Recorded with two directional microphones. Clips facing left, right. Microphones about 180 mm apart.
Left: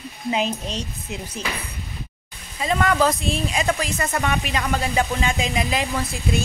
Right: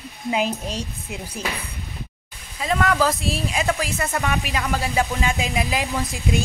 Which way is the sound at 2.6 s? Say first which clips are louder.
Left 1 dB; centre (ahead or behind).